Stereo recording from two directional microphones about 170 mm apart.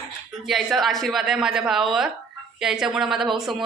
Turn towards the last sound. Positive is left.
turn(degrees=0)  # may be behind; listen again after turning